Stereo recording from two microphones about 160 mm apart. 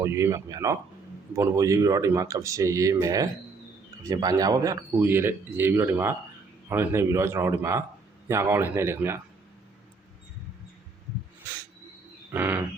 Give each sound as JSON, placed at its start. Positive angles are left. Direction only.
{"t": 0.0, "sound": "speech", "side_deg": -15}
{"t": 12.3, "sound": "speech", "side_deg": -15}